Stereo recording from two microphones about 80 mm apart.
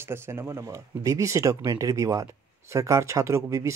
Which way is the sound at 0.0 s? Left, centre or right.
Right.